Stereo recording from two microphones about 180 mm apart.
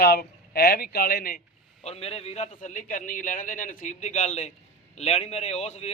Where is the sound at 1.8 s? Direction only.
35° left (ahead or behind).